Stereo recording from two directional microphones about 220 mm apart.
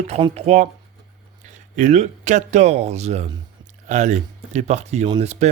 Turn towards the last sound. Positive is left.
turn(degrees=-30)  # may be behind; listen again after turning